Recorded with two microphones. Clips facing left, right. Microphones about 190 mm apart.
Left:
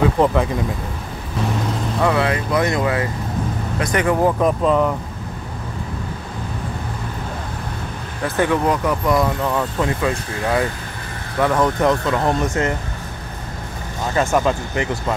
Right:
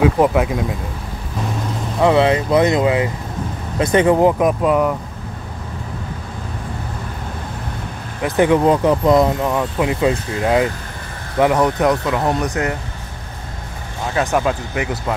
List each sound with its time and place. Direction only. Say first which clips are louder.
0.2 s speech: right 2 dB; 10° right (ahead or behind)
2.0 s speech: right 6 dB; 25° right (ahead or behind)
8.2 s speech: right 4 dB; 20° right (ahead or behind)
14.3 s speech: even; 5° right (ahead or behind)